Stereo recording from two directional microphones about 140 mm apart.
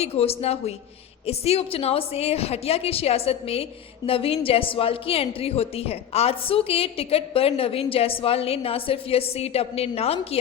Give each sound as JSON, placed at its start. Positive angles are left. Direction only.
{"t": 0.0, "sound": "a woman's voice", "side_deg": 45}